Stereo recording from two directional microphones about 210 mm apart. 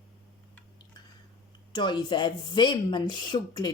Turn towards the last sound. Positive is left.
turn(degrees=20)  # may be behind; listen again after turning